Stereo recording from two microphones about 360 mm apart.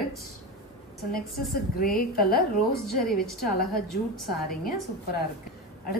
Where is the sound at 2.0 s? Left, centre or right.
Left.